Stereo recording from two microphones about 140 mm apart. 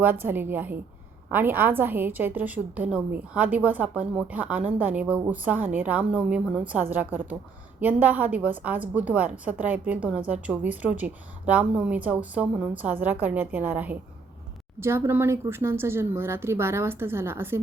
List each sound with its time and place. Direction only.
0.0 s a woman's voice: 15° right (ahead or behind)